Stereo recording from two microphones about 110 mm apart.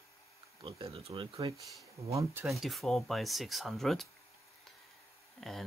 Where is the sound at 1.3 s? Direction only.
30° right (ahead or behind).